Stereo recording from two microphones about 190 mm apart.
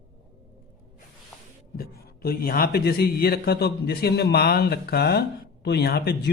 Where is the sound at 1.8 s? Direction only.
55° left (ahead or behind).